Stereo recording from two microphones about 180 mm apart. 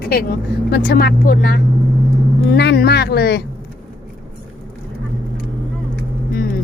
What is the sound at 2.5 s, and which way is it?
Speech, 65° left (ahead or behind).